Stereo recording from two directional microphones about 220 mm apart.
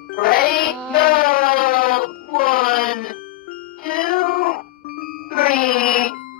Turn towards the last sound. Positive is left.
turn(degrees=40)  # may be behind; listen again after turning